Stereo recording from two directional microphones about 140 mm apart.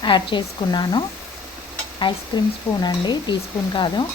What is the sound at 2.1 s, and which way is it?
Speech, 40° left (ahead or behind).